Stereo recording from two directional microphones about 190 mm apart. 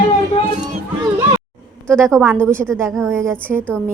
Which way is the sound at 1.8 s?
5° left (ahead or behind).